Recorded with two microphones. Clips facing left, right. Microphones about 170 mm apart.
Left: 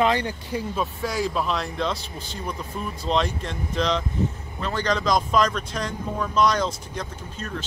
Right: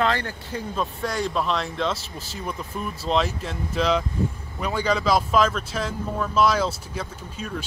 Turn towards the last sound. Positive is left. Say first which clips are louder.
# right 1 dB
turn(degrees=-5)  # may be behind; listen again after turning